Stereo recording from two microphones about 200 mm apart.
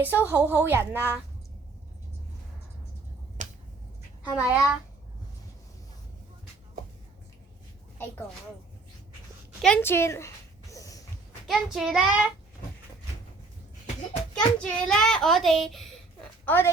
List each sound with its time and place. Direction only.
0.0 s a woman's voice: 10° right (ahead or behind)
3.4 s finger snapping: 40° right (ahead or behind)
4.4 s a child's voice: 5° right (ahead or behind)
9.6 s a sound: 5° left (ahead or behind)
11.4 s a child's voice: centre (ahead or behind)
14.3 s a child's voice: 5° left (ahead or behind)